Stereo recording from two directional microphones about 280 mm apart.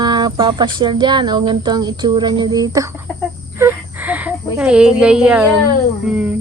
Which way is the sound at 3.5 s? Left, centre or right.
Centre.